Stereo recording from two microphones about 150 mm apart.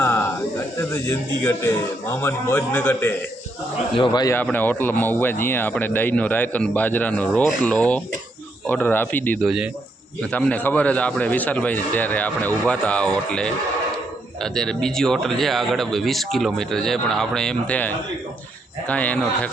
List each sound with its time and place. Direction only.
0.0 s a sound: 20° left (ahead or behind)
0.8 s speech: 15° left (ahead or behind)
3.9 s speech: 30° left (ahead or behind)
4.5 s speech: 10° left (ahead or behind)